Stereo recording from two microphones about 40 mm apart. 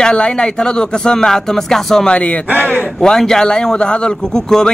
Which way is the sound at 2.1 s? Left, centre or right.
Left.